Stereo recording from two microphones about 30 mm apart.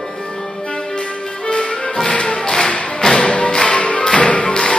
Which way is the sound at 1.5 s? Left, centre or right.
Left.